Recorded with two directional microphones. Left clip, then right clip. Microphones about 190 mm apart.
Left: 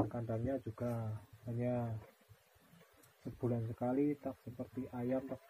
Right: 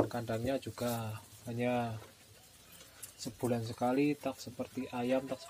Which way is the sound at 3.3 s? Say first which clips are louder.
Right 5 dB; 35° right (ahead or behind).